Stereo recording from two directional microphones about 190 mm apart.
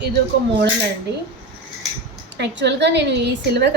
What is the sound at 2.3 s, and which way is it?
Speech, 65° right (ahead or behind).